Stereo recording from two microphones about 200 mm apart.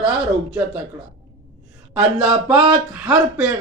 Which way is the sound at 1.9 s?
5° right (ahead or behind).